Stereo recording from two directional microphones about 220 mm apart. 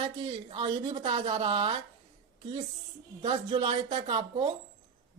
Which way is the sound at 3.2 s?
25° right (ahead or behind).